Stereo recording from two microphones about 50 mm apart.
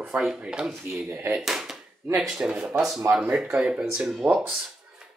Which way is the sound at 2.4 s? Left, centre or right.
Centre.